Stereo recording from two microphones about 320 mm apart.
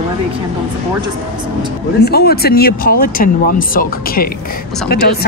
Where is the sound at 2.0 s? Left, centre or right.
Left.